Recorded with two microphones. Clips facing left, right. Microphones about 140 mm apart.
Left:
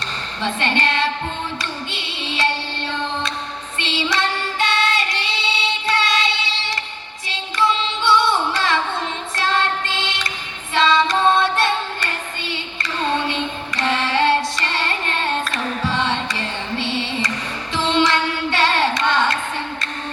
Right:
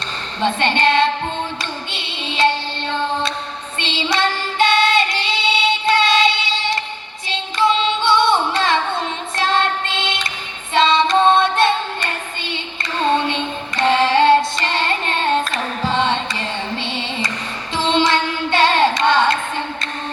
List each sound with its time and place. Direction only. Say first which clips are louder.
0.4 s female singing: right 4 dB; 25° right (ahead or behind)
1.9 s music: right 1 dB; 25° right (ahead or behind)
3.8 s child singing: right 2 dB; 25° right (ahead or behind)
7.8 s music: right 2 dB; 20° right (ahead or behind)
9.3 s child singing: right 2 dB; 25° right (ahead or behind)